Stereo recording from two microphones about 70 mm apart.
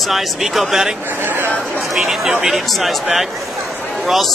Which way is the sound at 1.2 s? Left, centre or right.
Right.